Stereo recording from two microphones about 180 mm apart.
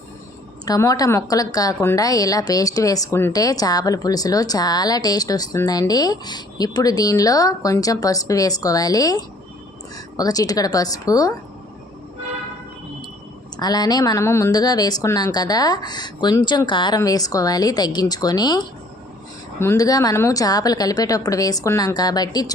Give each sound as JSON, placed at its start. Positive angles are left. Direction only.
{"t": 0.6, "sound": "a woman's voice", "side_deg": 20}
{"t": 13.6, "sound": "a woman's voice", "side_deg": 20}